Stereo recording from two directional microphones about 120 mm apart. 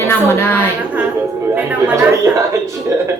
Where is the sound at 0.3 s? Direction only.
20° left (ahead or behind).